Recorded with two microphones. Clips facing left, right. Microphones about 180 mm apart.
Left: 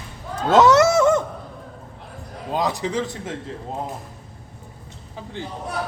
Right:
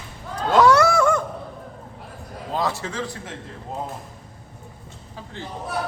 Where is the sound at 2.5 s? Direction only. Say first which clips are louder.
Left 3 dB; 15° left (ahead or behind).